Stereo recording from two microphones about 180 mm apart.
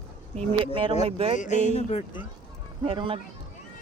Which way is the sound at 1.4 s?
40° left (ahead or behind).